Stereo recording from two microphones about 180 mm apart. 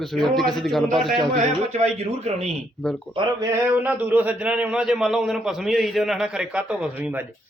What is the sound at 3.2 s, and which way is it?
Speech, 30° right (ahead or behind).